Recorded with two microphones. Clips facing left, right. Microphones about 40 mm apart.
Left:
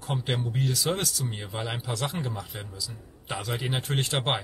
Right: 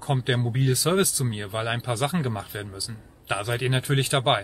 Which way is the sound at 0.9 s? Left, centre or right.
Centre.